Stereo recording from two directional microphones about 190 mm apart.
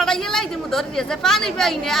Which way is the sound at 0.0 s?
Centre (ahead or behind).